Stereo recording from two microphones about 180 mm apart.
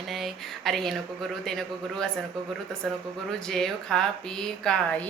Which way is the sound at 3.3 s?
5° left (ahead or behind).